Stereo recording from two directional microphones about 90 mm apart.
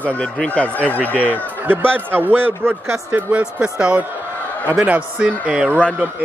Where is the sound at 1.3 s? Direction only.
25° right (ahead or behind).